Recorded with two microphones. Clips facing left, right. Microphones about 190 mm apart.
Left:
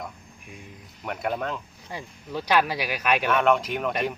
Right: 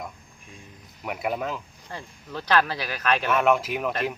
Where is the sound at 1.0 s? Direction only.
5° right (ahead or behind).